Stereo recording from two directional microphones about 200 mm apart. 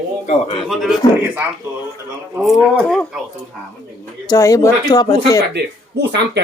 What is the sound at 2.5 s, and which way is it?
Speech, 5° right (ahead or behind).